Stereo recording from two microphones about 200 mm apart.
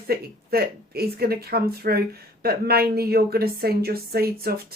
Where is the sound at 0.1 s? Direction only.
50° right (ahead or behind).